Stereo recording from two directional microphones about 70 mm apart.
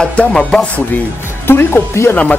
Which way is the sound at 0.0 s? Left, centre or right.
Centre.